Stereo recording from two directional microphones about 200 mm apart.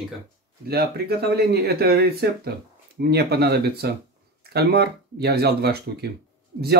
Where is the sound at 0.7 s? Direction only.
50° right (ahead or behind).